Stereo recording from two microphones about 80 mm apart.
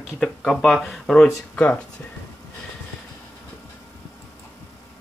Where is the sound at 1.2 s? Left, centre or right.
Centre.